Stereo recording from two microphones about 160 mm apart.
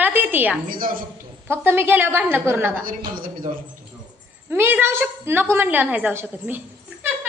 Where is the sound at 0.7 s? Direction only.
60° right (ahead or behind).